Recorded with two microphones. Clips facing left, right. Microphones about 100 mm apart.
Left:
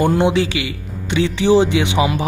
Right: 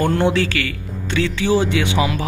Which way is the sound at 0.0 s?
15° left (ahead or behind).